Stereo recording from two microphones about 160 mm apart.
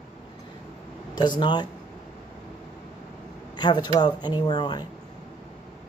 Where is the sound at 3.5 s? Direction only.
30° left (ahead or behind).